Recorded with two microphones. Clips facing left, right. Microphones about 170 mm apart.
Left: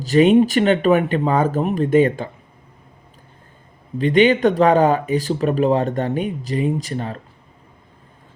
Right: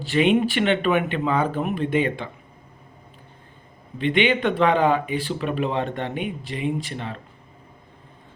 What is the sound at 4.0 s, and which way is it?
Speech, 40° left (ahead or behind).